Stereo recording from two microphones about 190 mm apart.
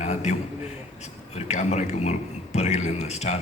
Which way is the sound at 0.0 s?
35° left (ahead or behind).